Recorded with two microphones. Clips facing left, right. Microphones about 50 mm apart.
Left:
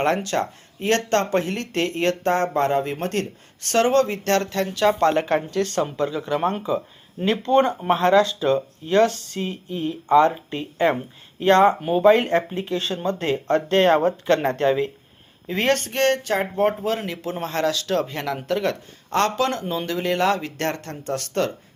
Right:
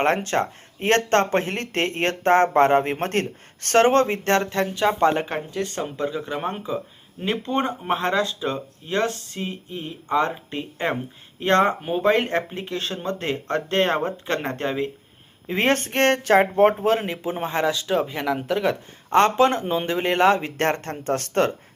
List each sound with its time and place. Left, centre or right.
0.0 s speech: right; by 18.8 s centre
19.1 s speech: right